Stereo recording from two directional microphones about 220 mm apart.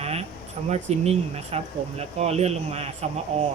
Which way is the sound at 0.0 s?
30° right (ahead or behind).